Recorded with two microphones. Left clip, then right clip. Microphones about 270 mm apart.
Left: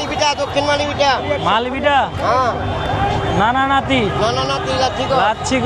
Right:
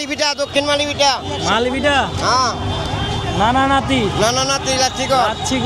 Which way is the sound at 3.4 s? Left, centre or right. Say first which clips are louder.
Right 1 dB; centre.